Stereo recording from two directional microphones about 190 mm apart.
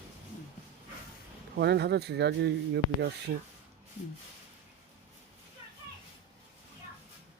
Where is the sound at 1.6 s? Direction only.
60° right (ahead or behind).